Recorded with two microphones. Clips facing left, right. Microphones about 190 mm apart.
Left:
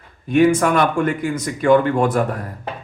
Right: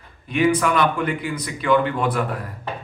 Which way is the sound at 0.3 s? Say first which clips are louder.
Left 5 dB; 45° left (ahead or behind).